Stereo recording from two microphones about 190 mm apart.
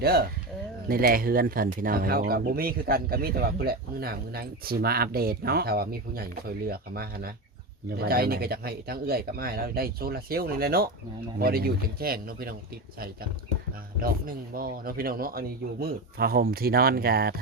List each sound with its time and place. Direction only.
0.0 s speech: 55° right (ahead or behind)
14.0 s speech: 50° right (ahead or behind)